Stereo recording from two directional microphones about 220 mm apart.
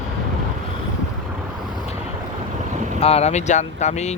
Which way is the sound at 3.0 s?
30° left (ahead or behind).